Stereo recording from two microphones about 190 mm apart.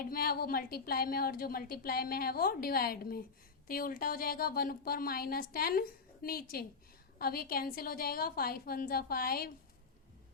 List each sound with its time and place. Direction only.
0.0 s a woman's voice: 50° left (ahead or behind)